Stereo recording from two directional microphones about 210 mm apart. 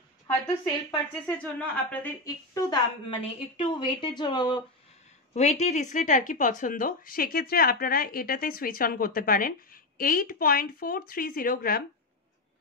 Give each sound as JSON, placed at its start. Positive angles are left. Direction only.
{"t": 1.1, "sound": "a woman's voice", "side_deg": 5}
{"t": 5.3, "sound": "speech", "side_deg": 30}